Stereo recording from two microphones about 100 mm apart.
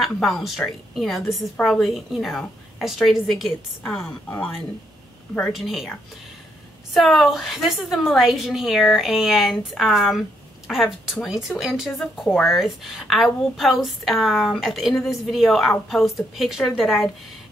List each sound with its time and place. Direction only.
0.0 s speech: centre (ahead or behind)
4.0 s speech: 15° left (ahead or behind)
5.5 s speech: centre (ahead or behind)